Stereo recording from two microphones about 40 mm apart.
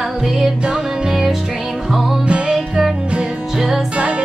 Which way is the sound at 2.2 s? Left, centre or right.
Right.